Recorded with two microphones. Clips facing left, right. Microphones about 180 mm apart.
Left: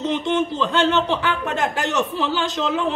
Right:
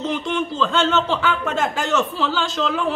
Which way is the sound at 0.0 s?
20° left (ahead or behind).